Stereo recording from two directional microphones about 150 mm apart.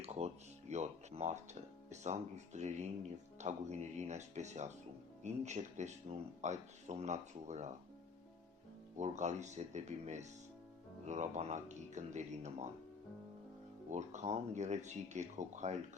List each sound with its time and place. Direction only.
0.0 s music: 45° right (ahead or behind)
0.7 s speech: 50° right (ahead or behind)
9.0 s speech: 50° right (ahead or behind)
13.9 s speech: 50° right (ahead or behind)